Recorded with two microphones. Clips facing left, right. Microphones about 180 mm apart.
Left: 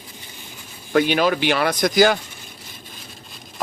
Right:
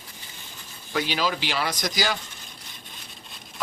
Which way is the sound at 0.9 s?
55° left (ahead or behind).